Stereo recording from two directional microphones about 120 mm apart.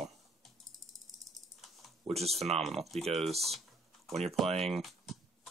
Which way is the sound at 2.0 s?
60° right (ahead or behind).